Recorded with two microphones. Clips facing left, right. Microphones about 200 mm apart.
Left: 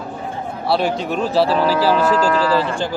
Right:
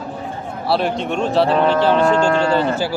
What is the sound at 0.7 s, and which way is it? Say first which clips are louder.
A man's voice: even; centre (ahead or behind).